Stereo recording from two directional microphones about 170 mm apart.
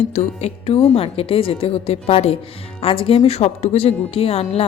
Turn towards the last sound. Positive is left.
turn(degrees=35)  # may be behind; listen again after turning